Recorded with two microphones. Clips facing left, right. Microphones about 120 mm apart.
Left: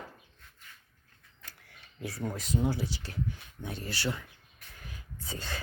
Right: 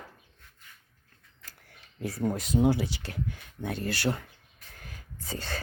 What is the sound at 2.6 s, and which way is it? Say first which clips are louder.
Speech: right 6 dB; 70° right (ahead or behind).